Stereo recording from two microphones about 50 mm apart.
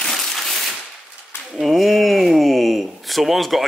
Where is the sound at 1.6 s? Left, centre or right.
Centre.